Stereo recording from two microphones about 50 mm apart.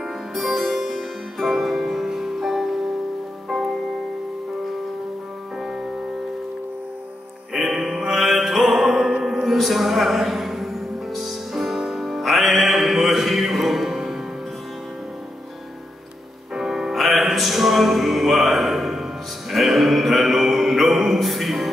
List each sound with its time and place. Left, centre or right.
0.3 s music: centre
7.5 s music: centre
16.5 s music: centre
19.5 s a sound: centre